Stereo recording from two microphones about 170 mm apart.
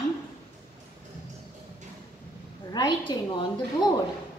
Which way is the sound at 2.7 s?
25° left (ahead or behind).